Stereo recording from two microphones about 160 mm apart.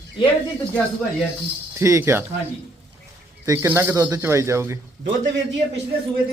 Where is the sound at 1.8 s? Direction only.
15° right (ahead or behind).